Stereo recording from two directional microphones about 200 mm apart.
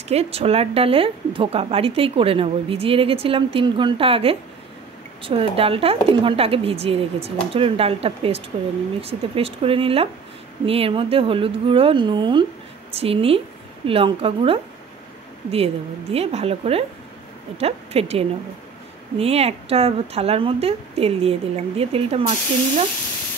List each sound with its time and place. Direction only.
0.1 s a woman's voice: 30° right (ahead or behind)